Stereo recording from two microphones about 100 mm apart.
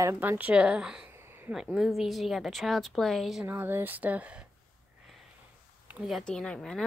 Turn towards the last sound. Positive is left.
turn(degrees=5)  # may be behind; listen again after turning